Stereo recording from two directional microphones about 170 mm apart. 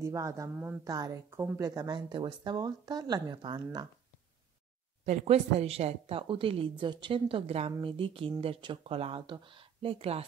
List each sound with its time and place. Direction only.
0.0 s speech: 20° right (ahead or behind)
5.0 s a woman's voice: 40° right (ahead or behind)